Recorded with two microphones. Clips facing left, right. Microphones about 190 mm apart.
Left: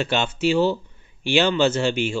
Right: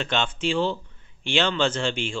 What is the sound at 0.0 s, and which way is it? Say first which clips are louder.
Speech: left 4 dB; 10° left (ahead or behind).